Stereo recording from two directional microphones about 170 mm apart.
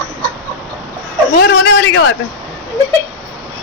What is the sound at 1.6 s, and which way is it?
Speech, 90° left.